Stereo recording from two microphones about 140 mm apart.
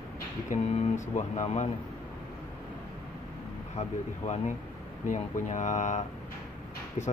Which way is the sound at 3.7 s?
50° left (ahead or behind).